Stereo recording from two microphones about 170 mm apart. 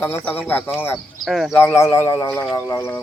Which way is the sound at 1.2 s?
Centre (ahead or behind).